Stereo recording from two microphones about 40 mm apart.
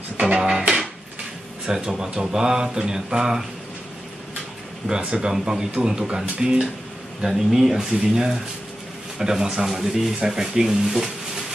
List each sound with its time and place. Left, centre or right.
0.4 s a sound: centre
1.7 s speech: centre
4.8 s speech: centre